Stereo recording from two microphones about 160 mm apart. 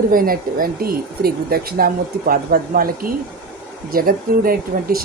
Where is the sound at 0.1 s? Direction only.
65° right (ahead or behind).